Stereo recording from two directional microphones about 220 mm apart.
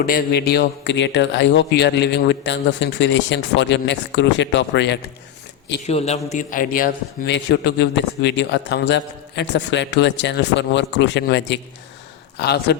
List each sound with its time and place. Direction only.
0.0 s a man's voice: 45° left (ahead or behind)
5.8 s a man's voice: 30° left (ahead or behind)
7.3 s a man's voice: 50° left (ahead or behind)